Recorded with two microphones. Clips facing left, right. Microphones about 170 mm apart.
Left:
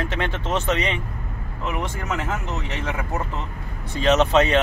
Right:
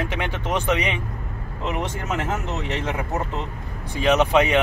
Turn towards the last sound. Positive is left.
turn(degrees=-10)  # may be behind; listen again after turning